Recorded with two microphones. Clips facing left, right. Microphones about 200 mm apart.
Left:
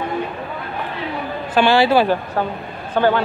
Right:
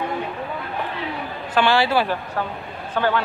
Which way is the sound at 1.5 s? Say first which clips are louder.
Left 4 dB; 15° left (ahead or behind).